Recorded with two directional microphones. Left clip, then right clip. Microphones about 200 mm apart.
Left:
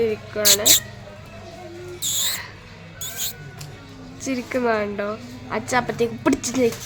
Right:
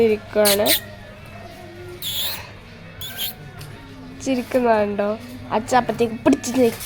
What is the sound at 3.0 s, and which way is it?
Mouse, 10° left (ahead or behind).